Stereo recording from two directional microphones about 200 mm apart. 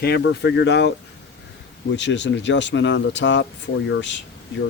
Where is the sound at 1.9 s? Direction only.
60° left (ahead or behind).